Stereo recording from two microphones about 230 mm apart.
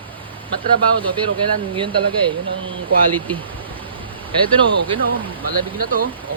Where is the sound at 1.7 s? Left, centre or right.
Right.